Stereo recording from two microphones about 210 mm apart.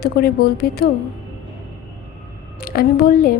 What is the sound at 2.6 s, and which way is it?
Speech, 45° left (ahead or behind).